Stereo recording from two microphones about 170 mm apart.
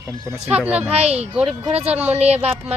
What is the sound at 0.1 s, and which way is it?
Speech, 20° right (ahead or behind).